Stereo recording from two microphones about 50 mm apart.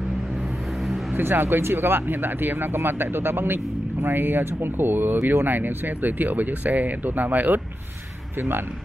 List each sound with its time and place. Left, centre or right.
1.1 s speech: right
8.4 s speech: right